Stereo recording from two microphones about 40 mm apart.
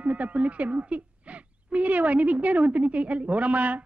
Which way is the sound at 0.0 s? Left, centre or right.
Right.